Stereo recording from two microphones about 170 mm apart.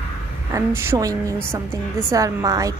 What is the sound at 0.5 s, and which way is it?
A woman's voice, 15° right (ahead or behind).